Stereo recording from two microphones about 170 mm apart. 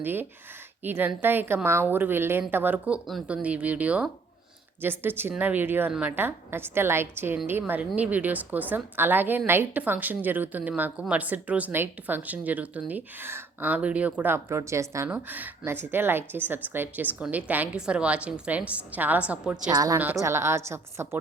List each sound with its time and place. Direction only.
0.0 s a woman's voice: 10° right (ahead or behind)
19.7 s a woman's voice: 20° right (ahead or behind)